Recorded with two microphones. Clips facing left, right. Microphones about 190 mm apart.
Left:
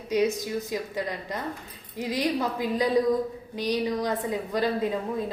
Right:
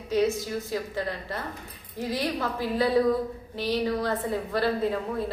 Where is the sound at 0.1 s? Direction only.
15° left (ahead or behind).